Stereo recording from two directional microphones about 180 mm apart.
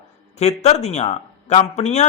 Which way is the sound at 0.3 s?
35° left (ahead or behind).